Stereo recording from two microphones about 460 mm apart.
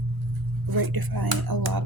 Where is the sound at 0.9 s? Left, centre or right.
Right.